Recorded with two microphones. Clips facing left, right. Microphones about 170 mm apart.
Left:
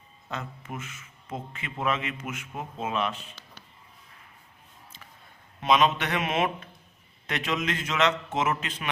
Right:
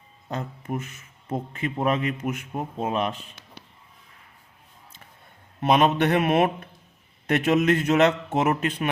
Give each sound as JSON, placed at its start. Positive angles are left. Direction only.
{"t": 0.3, "sound": "a man's voice", "side_deg": -35}
{"t": 5.6, "sound": "a man's voice", "side_deg": -55}